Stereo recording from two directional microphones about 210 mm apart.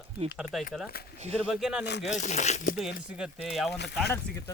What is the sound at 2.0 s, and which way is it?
Speech, 35° left (ahead or behind).